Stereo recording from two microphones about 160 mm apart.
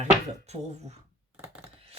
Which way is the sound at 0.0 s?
45° right (ahead or behind).